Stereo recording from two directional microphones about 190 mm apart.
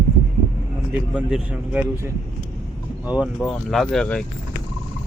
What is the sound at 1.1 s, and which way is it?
Speech, 5° right (ahead or behind).